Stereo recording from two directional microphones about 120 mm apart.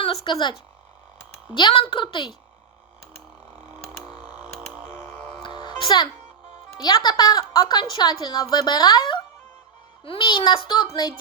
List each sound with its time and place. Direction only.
0.0 s a woman's voice: 45° left (ahead or behind)
1.5 s a woman's voice: 40° left (ahead or behind)
4.1 s a sound: 10° right (ahead or behind)
5.9 s a woman's voice: 40° left (ahead or behind)